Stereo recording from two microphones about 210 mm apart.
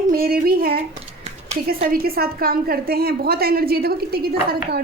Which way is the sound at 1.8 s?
45° right (ahead or behind).